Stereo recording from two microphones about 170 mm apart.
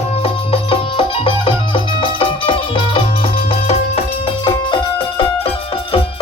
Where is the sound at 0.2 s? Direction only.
30° left (ahead or behind).